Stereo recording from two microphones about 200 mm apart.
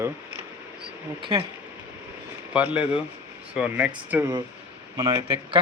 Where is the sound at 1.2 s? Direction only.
25° right (ahead or behind).